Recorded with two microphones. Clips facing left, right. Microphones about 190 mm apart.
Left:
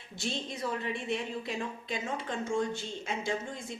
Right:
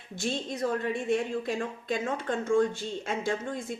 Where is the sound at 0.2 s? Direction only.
45° right (ahead or behind).